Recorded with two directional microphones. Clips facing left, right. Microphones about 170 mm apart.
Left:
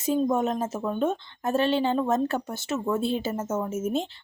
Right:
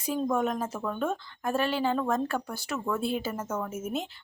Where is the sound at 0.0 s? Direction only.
25° left (ahead or behind).